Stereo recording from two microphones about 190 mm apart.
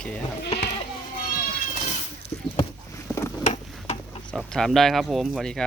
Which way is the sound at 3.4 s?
35° left (ahead or behind).